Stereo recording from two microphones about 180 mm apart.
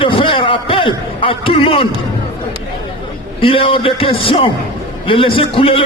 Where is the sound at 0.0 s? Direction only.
30° left (ahead or behind).